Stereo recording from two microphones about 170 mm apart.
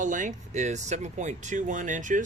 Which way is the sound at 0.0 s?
50° right (ahead or behind).